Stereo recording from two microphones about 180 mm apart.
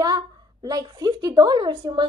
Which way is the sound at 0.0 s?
20° right (ahead or behind).